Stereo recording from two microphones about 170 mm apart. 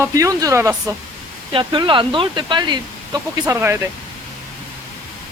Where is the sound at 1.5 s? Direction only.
30° right (ahead or behind).